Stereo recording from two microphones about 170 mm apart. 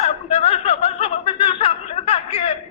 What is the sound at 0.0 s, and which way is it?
Snicker, 35° left (ahead or behind).